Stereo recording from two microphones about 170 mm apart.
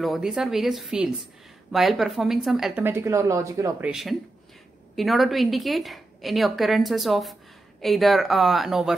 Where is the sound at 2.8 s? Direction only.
15° right (ahead or behind).